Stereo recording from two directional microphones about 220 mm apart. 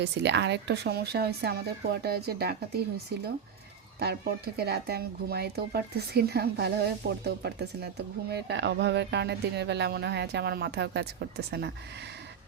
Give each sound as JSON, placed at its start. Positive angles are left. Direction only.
{"t": 0.0, "sound": "speech", "side_deg": -50}
{"t": 4.0, "sound": "speech", "side_deg": -45}